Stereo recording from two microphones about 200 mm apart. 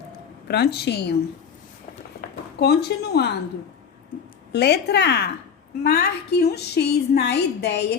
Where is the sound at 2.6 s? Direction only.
55° left (ahead or behind).